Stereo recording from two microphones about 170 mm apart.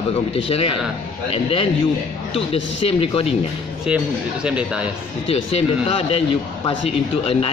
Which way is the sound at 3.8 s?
5° right (ahead or behind).